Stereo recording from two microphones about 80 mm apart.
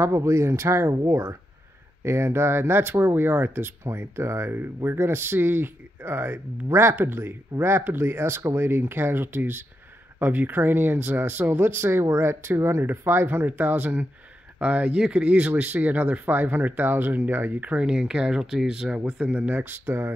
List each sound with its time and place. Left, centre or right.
0.0 s speech: right